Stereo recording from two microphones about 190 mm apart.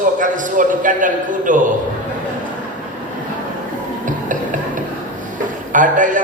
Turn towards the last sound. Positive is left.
turn(degrees=-45)  # may be behind; listen again after turning